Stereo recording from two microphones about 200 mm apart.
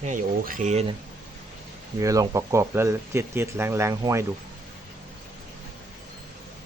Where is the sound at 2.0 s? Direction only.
15° right (ahead or behind).